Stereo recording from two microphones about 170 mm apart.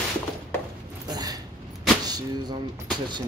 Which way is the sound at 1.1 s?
20° right (ahead or behind).